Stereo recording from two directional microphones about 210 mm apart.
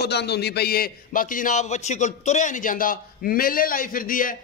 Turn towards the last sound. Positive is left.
turn(degrees=40)  # may be behind; listen again after turning